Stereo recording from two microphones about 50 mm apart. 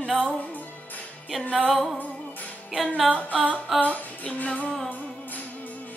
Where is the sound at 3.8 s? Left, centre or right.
Left.